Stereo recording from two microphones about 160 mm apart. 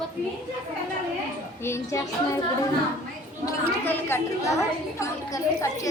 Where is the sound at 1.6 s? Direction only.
20° left (ahead or behind).